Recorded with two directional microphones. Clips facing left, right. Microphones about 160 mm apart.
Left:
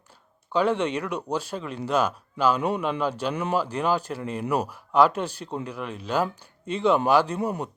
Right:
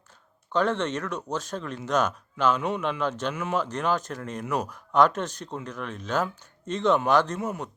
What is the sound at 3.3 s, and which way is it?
Speech, 35° left (ahead or behind).